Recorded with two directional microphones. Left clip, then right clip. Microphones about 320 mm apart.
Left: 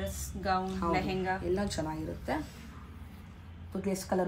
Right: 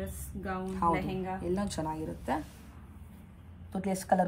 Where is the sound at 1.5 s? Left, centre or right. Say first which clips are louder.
Left 1 dB; right.